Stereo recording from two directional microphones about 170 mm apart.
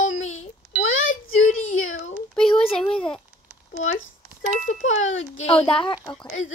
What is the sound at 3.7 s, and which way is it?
A child's voice, 45° left (ahead or behind).